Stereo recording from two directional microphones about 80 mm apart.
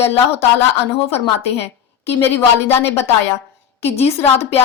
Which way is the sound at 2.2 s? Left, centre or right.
Left.